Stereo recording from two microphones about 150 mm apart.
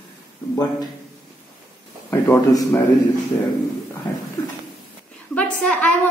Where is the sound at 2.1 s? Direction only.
15° left (ahead or behind).